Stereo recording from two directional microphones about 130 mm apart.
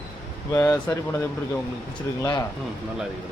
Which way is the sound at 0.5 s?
20° left (ahead or behind).